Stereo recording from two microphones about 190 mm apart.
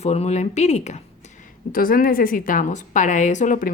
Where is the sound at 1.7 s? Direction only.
50° left (ahead or behind).